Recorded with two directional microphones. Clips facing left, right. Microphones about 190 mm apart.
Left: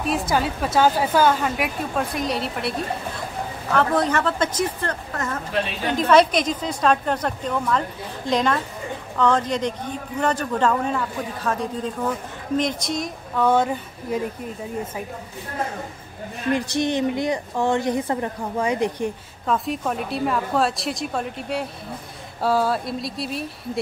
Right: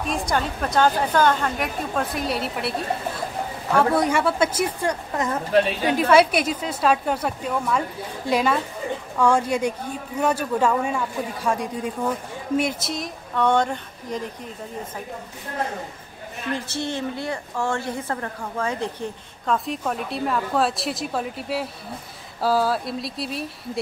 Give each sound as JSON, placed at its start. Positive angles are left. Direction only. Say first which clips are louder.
{"t": 0.1, "sound": "a woman's voice", "louder": "left 2 dB", "side_deg": 5}
{"t": 3.7, "sound": "a man's voice", "louder": "right 1 dB", "side_deg": -10}
{"t": 16.5, "sound": "a woman's voice", "louder": "left 6 dB", "side_deg": 15}
{"t": 19.4, "sound": "a woman's voice", "louder": "left 1 dB", "side_deg": 0}